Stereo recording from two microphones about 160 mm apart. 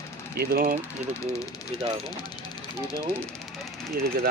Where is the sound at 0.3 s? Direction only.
65° right (ahead or behind).